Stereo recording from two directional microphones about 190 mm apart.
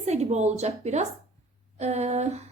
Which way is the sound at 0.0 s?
35° right (ahead or behind).